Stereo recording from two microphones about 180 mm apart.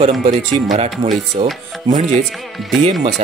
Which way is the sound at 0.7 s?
35° right (ahead or behind).